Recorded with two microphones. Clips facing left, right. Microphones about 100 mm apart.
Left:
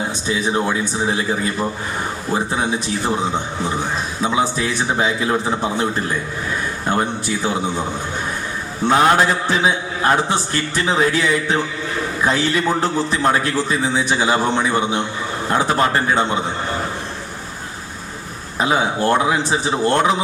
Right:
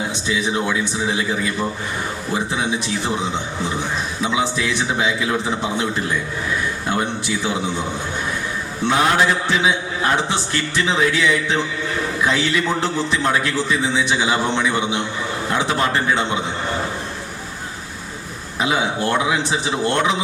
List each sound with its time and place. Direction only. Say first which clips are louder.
0.3 s a man's voice: left 2 dB; 40° left (ahead or behind)
4.2 s a man's voice: left 2 dB; 40° left (ahead or behind)
8.9 s a man's voice: left 3 dB; 40° left (ahead or behind)
18.6 s a man's voice: left 2 dB; 35° left (ahead or behind)